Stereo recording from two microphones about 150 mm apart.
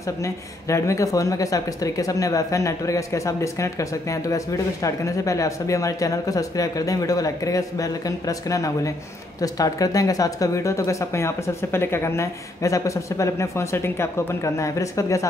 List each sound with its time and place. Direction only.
0.0 s a woman's voice: 20° left (ahead or behind)